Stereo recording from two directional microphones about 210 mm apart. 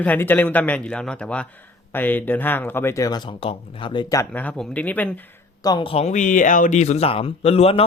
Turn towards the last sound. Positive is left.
turn(degrees=25)  # may be behind; listen again after turning